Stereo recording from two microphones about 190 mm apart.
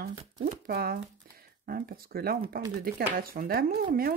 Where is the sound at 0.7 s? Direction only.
55° right (ahead or behind).